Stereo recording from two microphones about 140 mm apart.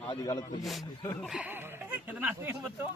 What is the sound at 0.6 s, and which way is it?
A man's voice, centre (ahead or behind).